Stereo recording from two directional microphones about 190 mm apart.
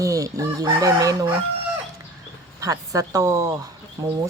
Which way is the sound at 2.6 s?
15° right (ahead or behind).